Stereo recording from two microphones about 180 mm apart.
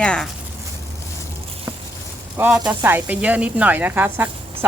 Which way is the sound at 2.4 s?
5° right (ahead or behind).